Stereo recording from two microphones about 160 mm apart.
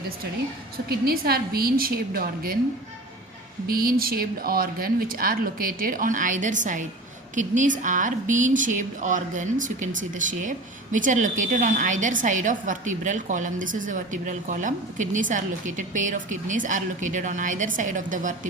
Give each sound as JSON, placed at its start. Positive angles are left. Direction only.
{"t": 0.9, "sound": "a woman's voice", "side_deg": -70}
{"t": 3.7, "sound": "a woman's voice", "side_deg": -65}